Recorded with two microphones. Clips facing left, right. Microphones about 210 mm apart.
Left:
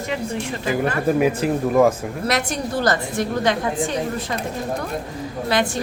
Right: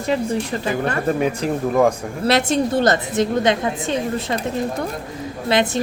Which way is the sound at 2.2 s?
25° right (ahead or behind).